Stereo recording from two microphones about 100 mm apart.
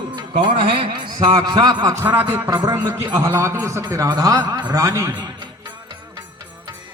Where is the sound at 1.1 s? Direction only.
40° right (ahead or behind).